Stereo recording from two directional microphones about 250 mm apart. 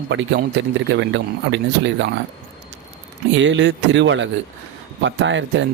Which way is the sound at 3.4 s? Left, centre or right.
Right.